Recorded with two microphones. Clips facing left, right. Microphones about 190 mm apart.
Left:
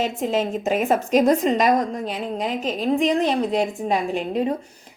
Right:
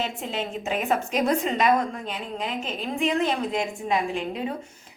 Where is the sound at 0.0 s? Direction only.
45° left (ahead or behind).